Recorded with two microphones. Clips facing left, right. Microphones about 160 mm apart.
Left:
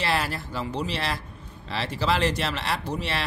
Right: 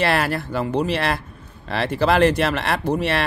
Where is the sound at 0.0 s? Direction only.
60° right (ahead or behind).